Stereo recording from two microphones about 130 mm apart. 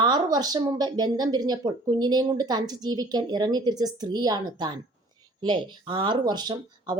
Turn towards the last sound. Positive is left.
turn(degrees=-35)  # may be behind; listen again after turning